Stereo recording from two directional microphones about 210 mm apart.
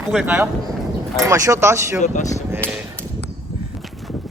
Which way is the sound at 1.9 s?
35° left (ahead or behind).